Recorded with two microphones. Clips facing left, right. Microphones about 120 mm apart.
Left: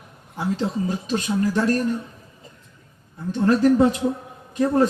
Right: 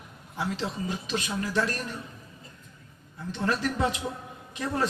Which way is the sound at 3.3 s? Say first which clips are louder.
Left 11 dB; 40° left (ahead or behind).